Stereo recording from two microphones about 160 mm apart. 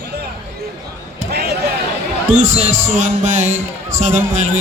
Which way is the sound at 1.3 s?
90° right.